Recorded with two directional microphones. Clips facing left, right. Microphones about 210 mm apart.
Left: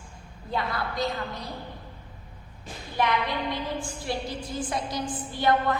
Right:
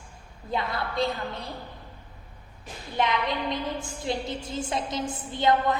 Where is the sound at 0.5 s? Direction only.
25° right (ahead or behind).